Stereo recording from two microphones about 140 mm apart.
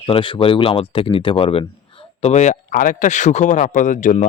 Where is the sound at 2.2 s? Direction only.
55° left (ahead or behind).